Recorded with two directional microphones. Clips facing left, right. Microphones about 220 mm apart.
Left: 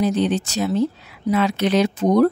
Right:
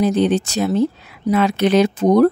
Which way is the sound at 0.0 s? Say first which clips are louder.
Right 3 dB; 55° right (ahead or behind).